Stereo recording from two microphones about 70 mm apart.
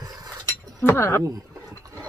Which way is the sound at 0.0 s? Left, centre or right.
Right.